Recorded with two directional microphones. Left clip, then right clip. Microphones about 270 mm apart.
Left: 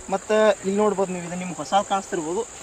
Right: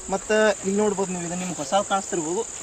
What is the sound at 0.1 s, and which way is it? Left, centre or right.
Speech, centre.